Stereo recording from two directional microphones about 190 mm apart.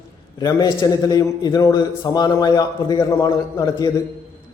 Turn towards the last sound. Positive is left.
turn(degrees=20)  # may be behind; listen again after turning